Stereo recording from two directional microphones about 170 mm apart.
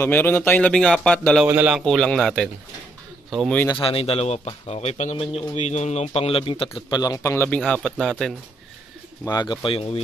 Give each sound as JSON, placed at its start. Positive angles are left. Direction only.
{"t": 0.0, "sound": "speech", "side_deg": 15}
{"t": 1.4, "sound": "a man's voice", "side_deg": -5}
{"t": 3.7, "sound": "a man's voice", "side_deg": 30}
{"t": 7.0, "sound": "speech", "side_deg": 20}
{"t": 9.2, "sound": "speech", "side_deg": 25}